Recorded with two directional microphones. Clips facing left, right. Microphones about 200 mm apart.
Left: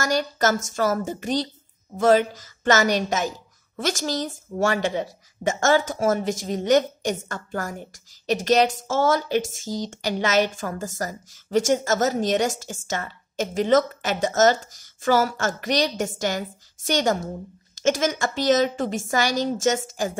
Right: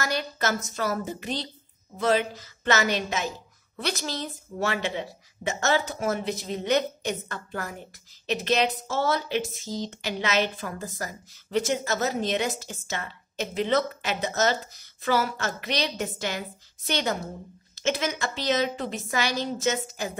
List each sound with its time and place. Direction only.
0.0 s a woman's voice: 45° left (ahead or behind)